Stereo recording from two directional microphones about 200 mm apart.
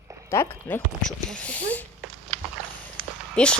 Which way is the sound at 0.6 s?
5° left (ahead or behind).